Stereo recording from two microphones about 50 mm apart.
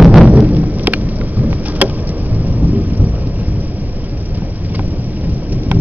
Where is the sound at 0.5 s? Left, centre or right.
Right.